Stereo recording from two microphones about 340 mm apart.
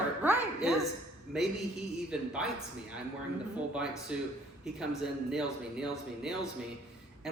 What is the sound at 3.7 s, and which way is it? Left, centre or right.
A man's voice, centre.